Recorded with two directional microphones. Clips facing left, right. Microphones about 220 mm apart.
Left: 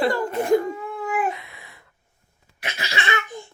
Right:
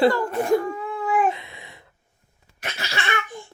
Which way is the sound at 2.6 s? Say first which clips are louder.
Left 1 dB; 15° left (ahead or behind).